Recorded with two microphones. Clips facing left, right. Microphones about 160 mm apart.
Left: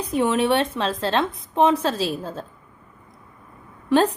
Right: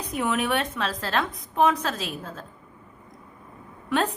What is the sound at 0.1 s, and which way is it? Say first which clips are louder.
A woman's voice: left 6 dB; 30° left (ahead or behind).